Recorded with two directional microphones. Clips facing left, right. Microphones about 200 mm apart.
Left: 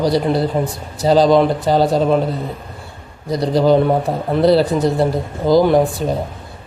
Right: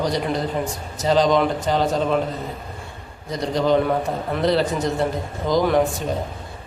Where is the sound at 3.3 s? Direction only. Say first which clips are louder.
Left 6 dB; 35° left (ahead or behind).